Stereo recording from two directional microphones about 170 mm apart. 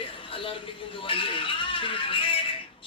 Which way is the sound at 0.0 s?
30° left (ahead or behind).